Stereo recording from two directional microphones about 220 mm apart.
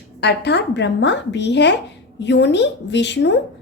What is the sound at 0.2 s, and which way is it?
A woman's voice, 50° left (ahead or behind).